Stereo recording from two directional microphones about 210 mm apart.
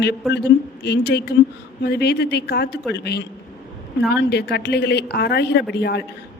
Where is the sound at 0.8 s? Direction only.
50° left (ahead or behind).